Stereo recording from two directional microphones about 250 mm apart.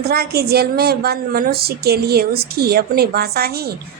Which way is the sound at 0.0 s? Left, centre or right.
Right.